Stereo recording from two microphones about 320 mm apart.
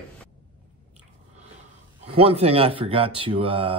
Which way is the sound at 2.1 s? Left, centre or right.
Centre.